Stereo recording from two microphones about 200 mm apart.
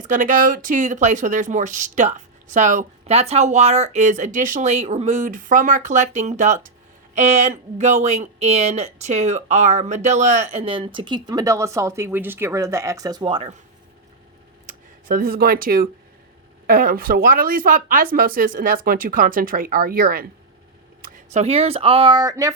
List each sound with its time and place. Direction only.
0.1 s speech: 40° right (ahead or behind)
14.7 s speech: 45° right (ahead or behind)
21.3 s speech: 30° right (ahead or behind)